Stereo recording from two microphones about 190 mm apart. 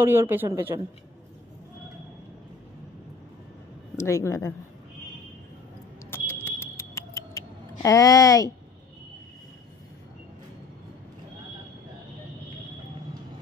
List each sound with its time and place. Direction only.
0.0 s a woman's voice: 10° right (ahead or behind)
3.9 s speech: 15° left (ahead or behind)
6.0 s a sound: 10° left (ahead or behind)